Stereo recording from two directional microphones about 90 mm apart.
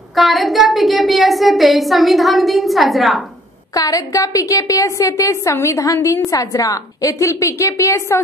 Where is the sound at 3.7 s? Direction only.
40° left (ahead or behind).